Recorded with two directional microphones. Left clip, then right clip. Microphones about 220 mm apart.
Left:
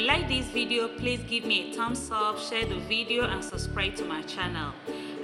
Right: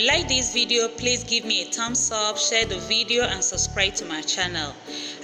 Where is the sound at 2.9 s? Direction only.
35° left (ahead or behind).